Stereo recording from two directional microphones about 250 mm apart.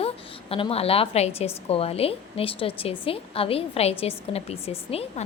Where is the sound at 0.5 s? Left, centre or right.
Left.